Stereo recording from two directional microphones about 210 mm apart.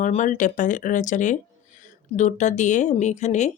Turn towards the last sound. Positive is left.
turn(degrees=35)  # may be behind; listen again after turning